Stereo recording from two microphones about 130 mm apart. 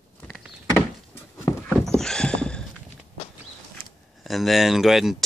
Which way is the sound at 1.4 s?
20° left (ahead or behind).